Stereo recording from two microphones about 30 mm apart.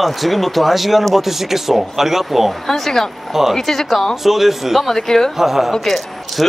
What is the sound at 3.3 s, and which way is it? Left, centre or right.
Speech, centre.